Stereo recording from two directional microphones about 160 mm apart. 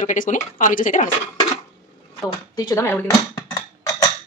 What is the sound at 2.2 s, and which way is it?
Dishes, 20° left (ahead or behind).